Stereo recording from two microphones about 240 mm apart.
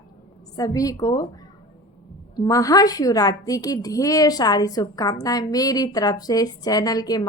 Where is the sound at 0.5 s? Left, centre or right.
Centre.